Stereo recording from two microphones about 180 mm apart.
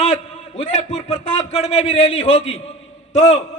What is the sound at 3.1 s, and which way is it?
Speech, 40° left (ahead or behind).